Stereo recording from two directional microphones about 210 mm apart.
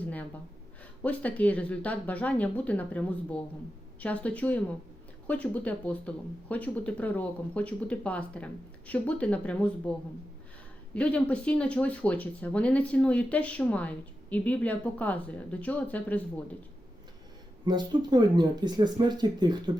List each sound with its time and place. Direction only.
1.0 s speech: 5° left (ahead or behind)
10.9 s speech: 5° left (ahead or behind)
17.7 s speech: 20° right (ahead or behind)